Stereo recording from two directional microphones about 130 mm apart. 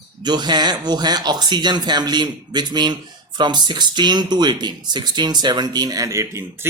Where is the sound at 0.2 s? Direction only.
35° right (ahead or behind).